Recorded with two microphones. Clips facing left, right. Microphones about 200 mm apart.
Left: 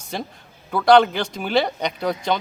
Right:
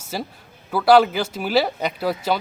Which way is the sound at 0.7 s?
5° right (ahead or behind).